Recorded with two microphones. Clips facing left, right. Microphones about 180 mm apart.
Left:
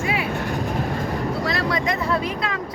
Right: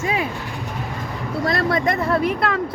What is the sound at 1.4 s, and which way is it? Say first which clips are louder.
Speech: right 7 dB; 50° right (ahead or behind).